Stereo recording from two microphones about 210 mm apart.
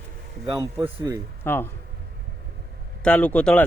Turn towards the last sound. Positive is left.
turn(degrees=5)  # may be behind; listen again after turning